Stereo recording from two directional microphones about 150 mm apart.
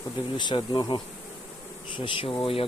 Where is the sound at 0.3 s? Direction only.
30° left (ahead or behind).